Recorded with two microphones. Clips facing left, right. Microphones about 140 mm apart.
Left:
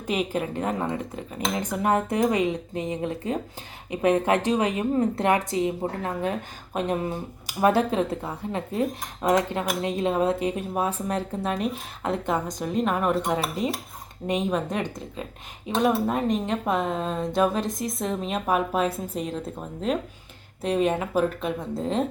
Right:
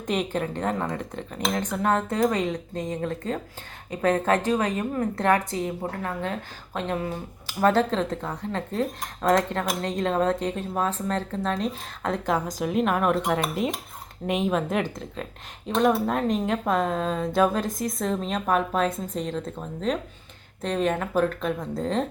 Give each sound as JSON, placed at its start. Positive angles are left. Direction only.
{"t": 0.1, "sound": "a woman's voice", "side_deg": 5}